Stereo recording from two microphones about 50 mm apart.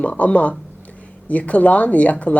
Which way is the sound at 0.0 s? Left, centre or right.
Left.